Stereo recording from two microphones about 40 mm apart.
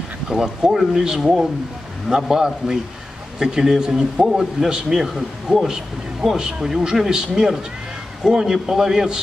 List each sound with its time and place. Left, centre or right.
0.3 s a man's voice: centre